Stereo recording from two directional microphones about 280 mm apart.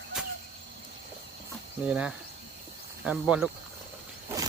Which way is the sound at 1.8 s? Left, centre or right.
Centre.